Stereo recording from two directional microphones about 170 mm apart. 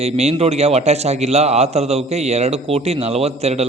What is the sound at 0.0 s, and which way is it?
A man's voice, 40° right (ahead or behind).